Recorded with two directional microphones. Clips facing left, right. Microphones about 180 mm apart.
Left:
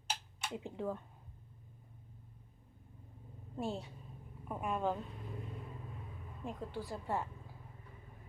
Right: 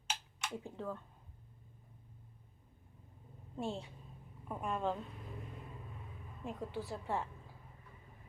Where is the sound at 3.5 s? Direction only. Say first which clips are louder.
Left 1 dB; centre (ahead or behind).